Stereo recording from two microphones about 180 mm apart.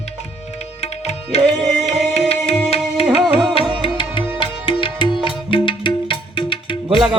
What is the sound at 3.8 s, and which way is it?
Music, 25° left (ahead or behind).